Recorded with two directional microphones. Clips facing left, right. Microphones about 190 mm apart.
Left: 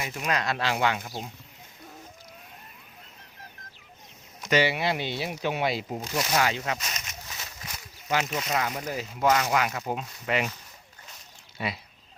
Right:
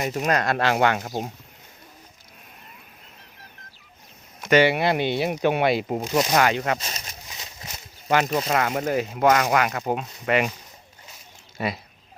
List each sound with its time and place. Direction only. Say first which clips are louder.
0.0 s speech: right 6 dB; 45° right (ahead or behind)
4.4 s speech: right 6 dB; 60° right (ahead or behind)
6.7 s speech: right 2 dB; 30° right (ahead or behind)
7.3 s a sound: right 1 dB; 20° right (ahead or behind)
8.3 s speech: right 7 dB; 35° right (ahead or behind)
8.5 s speech: right 6 dB; 55° right (ahead or behind)
11.5 s speech: right 5 dB; 45° right (ahead or behind)